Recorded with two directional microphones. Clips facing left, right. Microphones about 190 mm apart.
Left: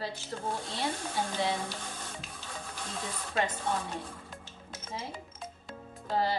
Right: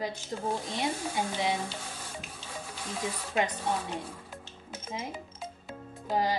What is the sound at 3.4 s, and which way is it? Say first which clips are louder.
Speech: right 2 dB; 20° right (ahead or behind).